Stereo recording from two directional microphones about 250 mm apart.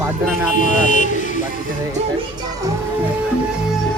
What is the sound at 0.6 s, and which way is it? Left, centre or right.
Speech, left.